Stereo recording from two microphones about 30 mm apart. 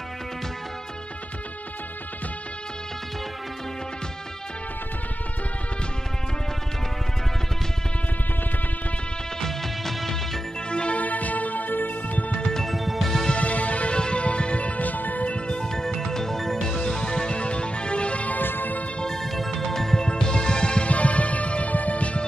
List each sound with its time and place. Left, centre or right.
9.4 s music: centre
10.7 s music: left
11.0 s music: left
12.6 s music: centre
13.4 s music: left
13.9 s music: left
15.2 s music: left
15.6 s music: centre; by 18.2 s left
18.2 s music: left
19.0 s music: centre
20.0 s music: left
20.9 s music: left